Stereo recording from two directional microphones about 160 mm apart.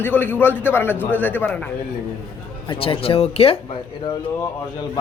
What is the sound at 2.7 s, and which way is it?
Speech, 35° left (ahead or behind).